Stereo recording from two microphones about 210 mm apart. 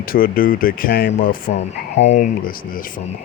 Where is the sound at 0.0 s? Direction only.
45° left (ahead or behind).